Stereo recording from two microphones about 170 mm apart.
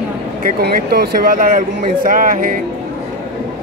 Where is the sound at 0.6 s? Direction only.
65° right (ahead or behind).